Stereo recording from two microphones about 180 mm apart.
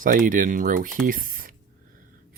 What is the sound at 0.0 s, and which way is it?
Speech, 50° right (ahead or behind).